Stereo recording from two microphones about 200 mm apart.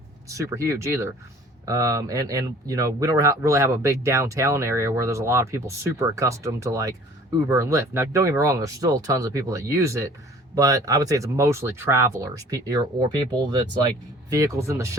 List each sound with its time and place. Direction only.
0.3 s speech: 15° right (ahead or behind)